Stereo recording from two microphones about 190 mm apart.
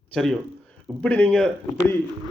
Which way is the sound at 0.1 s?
Centre (ahead or behind).